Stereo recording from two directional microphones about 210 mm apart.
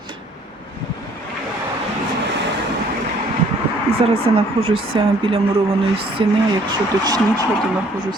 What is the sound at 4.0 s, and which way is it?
Speech, 25° right (ahead or behind).